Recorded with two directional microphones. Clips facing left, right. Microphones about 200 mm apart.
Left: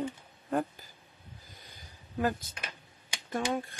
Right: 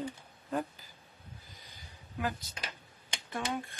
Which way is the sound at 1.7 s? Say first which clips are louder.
Left 6 dB; 50° left (ahead or behind).